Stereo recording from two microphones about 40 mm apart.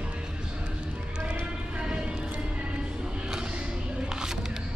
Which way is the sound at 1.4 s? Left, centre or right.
Right.